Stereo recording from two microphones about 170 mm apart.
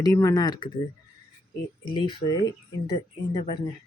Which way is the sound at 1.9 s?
30° left (ahead or behind).